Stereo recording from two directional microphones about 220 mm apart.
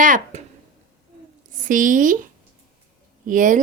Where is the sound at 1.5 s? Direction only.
35° right (ahead or behind).